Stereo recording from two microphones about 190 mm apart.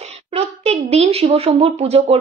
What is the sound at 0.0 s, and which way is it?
A woman's voice, 30° right (ahead or behind).